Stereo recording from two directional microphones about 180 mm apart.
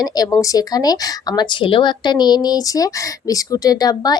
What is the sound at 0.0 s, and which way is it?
Speech, 20° left (ahead or behind).